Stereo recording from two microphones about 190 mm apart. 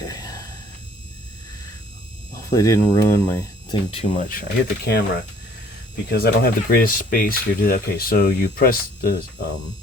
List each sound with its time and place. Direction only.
0.0 s a sound: 20° left (ahead or behind)
2.5 s speech: 20° left (ahead or behind)
3.9 s speech: 35° left (ahead or behind); by 5.0 s 55° left (ahead or behind)
6.1 s speech: 55° left (ahead or behind)